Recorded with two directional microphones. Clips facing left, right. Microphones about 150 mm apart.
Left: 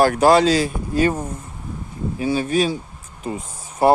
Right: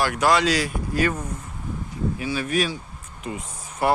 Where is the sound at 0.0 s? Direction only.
35° left (ahead or behind).